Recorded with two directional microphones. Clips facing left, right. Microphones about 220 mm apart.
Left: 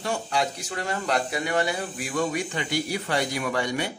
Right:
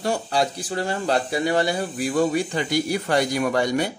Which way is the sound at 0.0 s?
35° right (ahead or behind).